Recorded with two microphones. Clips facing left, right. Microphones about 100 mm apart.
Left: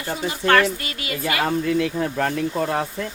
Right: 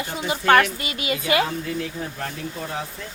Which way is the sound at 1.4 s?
65° left (ahead or behind).